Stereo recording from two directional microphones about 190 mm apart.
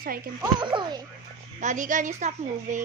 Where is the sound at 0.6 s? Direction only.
25° right (ahead or behind).